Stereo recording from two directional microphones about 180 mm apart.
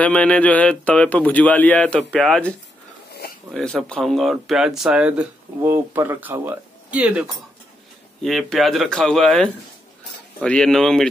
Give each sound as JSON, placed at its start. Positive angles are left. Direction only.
{"t": 0.0, "sound": "speech", "side_deg": 5}
{"t": 3.1, "sound": "a sound", "side_deg": 60}
{"t": 3.5, "sound": "speech", "side_deg": 5}